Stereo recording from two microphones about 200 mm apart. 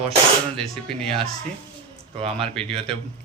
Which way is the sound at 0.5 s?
5° left (ahead or behind).